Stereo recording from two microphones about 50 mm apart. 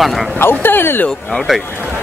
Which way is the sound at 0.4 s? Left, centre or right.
Left.